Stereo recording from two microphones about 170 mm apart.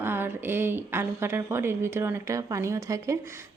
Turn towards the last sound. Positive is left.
turn(degrees=-15)  # may be behind; listen again after turning